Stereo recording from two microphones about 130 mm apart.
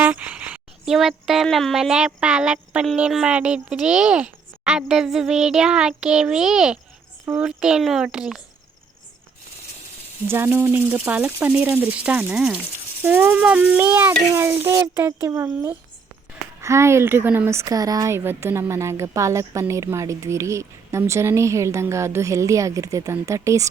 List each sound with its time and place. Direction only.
0.0 s speech: 10° right (ahead or behind)
10.2 s speech: 15° right (ahead or behind)